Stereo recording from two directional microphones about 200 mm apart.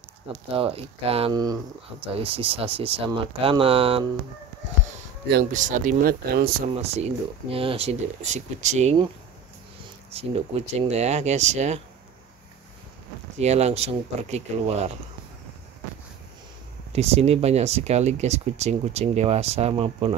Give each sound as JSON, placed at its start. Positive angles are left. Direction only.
{"t": 0.6, "sound": "speech", "side_deg": -30}
{"t": 5.3, "sound": "speech", "side_deg": -40}
{"t": 6.8, "sound": "speech", "side_deg": -30}
{"t": 10.1, "sound": "speech", "side_deg": -30}
{"t": 13.4, "sound": "speech", "side_deg": -35}
{"t": 16.9, "sound": "speech", "side_deg": -30}